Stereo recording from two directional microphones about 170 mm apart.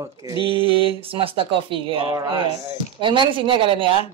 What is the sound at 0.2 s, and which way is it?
Speech, 20° right (ahead or behind).